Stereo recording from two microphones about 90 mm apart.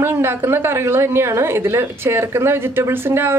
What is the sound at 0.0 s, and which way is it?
A woman's voice, 25° right (ahead or behind).